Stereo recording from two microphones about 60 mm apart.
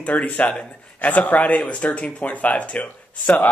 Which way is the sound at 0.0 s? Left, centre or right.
Left.